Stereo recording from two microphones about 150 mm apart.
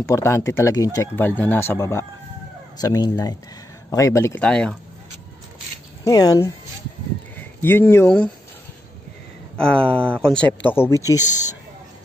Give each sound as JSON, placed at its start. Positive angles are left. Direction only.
{"t": 0.0, "sound": "speech", "side_deg": 20}
{"t": 4.4, "sound": "speech", "side_deg": 5}
{"t": 6.0, "sound": "speech", "side_deg": 25}
{"t": 9.6, "sound": "speech", "side_deg": 5}